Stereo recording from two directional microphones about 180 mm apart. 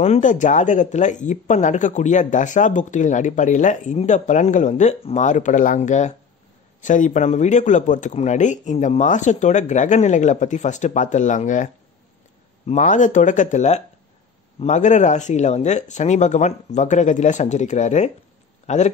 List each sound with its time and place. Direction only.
0.0 s speech: 40° left (ahead or behind)